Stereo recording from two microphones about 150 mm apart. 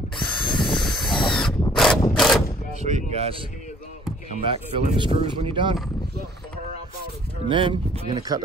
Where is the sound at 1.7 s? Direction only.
5° left (ahead or behind).